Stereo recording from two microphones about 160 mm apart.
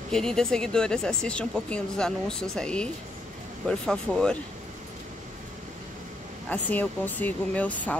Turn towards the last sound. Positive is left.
turn(degrees=10)  # may be behind; listen again after turning